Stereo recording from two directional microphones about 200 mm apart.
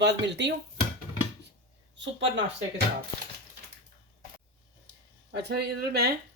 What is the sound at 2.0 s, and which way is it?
Speech, 65° right (ahead or behind).